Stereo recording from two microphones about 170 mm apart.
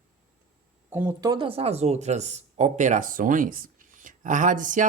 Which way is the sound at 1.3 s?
30° right (ahead or behind).